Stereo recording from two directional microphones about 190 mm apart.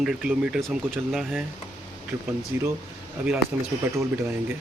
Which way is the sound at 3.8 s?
15° right (ahead or behind).